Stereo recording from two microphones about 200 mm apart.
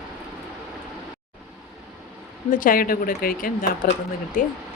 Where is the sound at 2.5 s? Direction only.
45° left (ahead or behind).